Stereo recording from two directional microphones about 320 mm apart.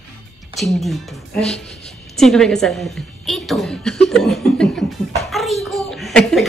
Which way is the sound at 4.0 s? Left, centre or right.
Centre.